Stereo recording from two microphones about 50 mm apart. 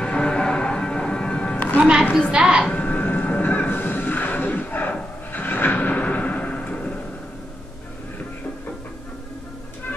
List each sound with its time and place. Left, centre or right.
0.0 s music: centre
1.8 s a woman's voice: centre
2.7 s train: left
5.3 s a sound: left